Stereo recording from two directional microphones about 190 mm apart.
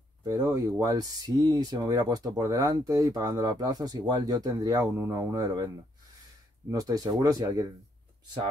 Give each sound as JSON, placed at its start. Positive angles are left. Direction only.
{"t": 0.2, "sound": "speech", "side_deg": -20}
{"t": 6.7, "sound": "speech", "side_deg": -20}